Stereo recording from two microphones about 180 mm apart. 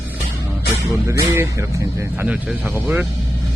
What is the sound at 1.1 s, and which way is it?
Speech, 15° right (ahead or behind).